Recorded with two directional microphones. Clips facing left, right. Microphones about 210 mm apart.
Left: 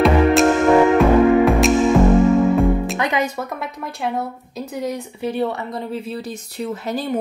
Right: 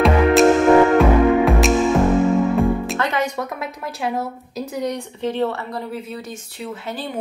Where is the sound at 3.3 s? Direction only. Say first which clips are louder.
Even; centre (ahead or behind).